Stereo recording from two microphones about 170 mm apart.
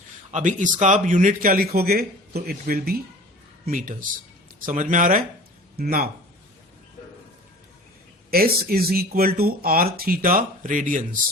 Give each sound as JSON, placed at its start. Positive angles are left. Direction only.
{"t": 0.3, "sound": "speech", "side_deg": -45}
{"t": 8.3, "sound": "speech", "side_deg": -60}